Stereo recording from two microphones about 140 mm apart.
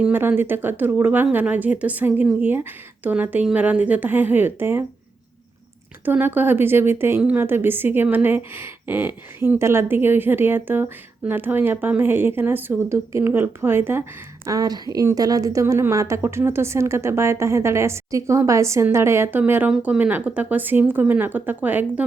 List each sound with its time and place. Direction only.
0.0 s a woman's voice: 15° right (ahead or behind)
6.1 s a woman's voice: 15° right (ahead or behind)